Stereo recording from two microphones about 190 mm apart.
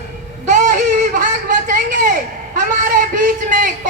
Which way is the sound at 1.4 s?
45° right (ahead or behind).